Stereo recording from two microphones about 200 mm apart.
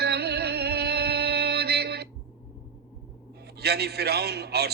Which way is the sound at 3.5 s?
55° right (ahead or behind).